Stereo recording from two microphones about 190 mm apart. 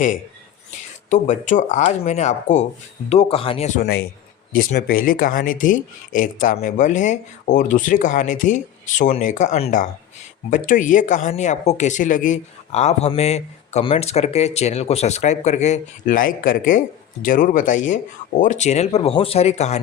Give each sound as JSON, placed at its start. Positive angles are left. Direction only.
{"t": 1.1, "sound": "speech", "side_deg": 40}
{"t": 3.8, "sound": "a man's voice", "side_deg": 55}